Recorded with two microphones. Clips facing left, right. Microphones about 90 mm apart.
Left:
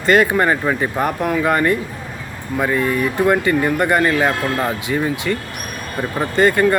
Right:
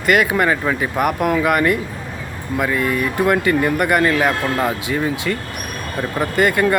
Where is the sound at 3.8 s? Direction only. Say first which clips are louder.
Even; 25° left (ahead or behind).